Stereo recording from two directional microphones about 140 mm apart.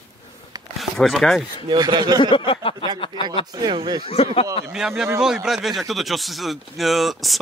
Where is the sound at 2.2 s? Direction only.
35° left (ahead or behind).